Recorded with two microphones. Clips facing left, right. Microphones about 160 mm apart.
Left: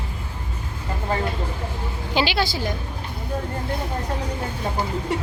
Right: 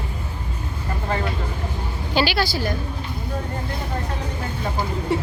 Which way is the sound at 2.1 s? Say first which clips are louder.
Right 1 dB; 20° left (ahead or behind).